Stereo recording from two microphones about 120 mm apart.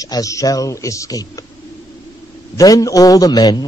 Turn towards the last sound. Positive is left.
turn(degrees=35)  # may be behind; listen again after turning